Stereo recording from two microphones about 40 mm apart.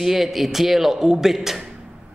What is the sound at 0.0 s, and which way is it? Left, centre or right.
A man's voice, centre.